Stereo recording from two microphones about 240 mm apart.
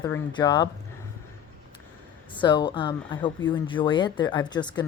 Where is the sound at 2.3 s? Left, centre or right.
Centre.